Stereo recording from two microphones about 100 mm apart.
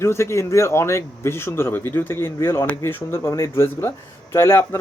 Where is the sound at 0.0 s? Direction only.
25° left (ahead or behind).